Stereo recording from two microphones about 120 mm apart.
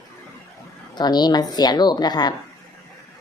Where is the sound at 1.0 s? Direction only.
35° left (ahead or behind).